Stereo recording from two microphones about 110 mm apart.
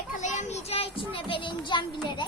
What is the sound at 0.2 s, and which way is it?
A child's voice, 90° left.